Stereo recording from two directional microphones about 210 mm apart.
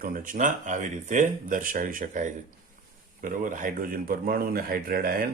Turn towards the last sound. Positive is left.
turn(degrees=-45)  # may be behind; listen again after turning